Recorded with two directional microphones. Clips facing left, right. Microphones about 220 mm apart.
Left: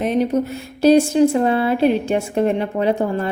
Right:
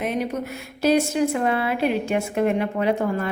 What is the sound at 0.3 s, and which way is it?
A woman's voice, 30° left (ahead or behind).